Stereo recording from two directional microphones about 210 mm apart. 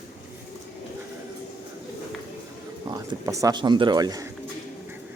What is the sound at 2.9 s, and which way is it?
Speech, 15° right (ahead or behind).